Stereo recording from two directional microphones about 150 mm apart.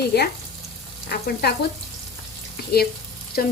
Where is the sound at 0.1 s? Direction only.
90° left.